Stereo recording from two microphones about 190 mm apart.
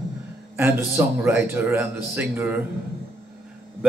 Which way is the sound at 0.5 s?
15° right (ahead or behind).